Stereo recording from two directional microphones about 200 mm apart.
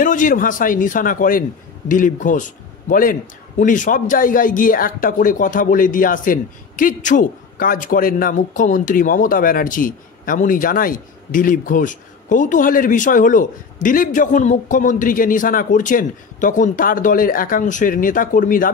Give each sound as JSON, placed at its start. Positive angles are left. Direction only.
{"t": 0.0, "sound": "a man's voice", "side_deg": 40}